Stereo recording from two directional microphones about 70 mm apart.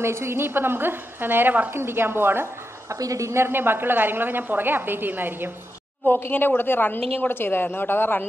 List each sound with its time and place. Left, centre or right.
0.0 s a woman's voice: right
2.9 s speech: right
3.4 s a woman's voice: right
6.0 s a woman's voice: left